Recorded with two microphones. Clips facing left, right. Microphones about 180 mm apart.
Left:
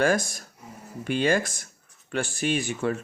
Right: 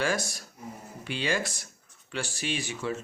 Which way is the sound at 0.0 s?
50° left (ahead or behind).